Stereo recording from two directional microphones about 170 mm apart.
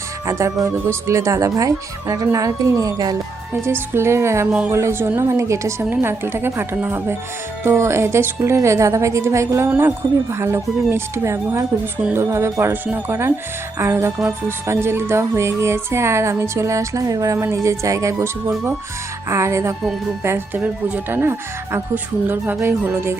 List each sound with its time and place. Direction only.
0.3 s speech: 20° right (ahead or behind)